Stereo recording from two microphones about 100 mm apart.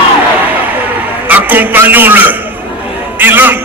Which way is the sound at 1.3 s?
20° right (ahead or behind).